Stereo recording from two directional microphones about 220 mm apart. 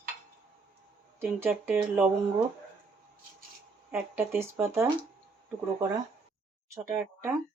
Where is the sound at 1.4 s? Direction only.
10° right (ahead or behind).